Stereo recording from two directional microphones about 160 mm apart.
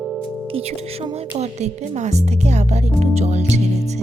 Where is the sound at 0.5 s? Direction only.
40° right (ahead or behind).